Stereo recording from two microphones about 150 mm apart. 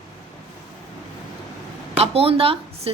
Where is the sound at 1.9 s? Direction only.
40° right (ahead or behind).